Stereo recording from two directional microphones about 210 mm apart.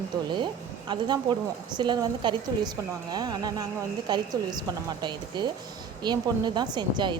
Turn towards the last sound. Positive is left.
turn(degrees=-20)  # may be behind; listen again after turning